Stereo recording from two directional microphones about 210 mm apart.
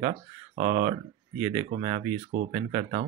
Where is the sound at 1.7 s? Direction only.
35° right (ahead or behind).